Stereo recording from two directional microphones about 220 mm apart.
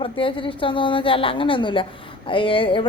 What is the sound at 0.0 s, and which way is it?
A woman's voice, 25° left (ahead or behind).